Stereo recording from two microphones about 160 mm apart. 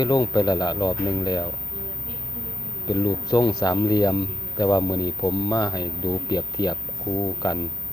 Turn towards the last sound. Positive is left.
turn(degrees=25)  # may be behind; listen again after turning